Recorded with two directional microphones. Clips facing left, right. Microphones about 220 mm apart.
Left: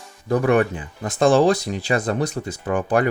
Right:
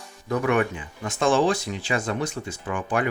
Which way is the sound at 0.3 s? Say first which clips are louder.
Left 5 dB; 35° left (ahead or behind).